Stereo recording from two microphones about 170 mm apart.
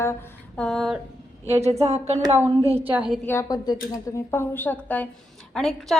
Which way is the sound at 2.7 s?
10° right (ahead or behind).